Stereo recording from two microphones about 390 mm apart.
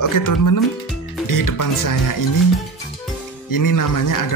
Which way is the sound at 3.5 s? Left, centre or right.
Left.